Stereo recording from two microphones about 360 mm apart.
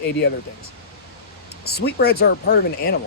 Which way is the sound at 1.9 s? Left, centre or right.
Left.